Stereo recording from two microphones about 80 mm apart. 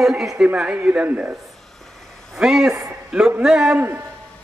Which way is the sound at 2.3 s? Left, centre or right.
Centre.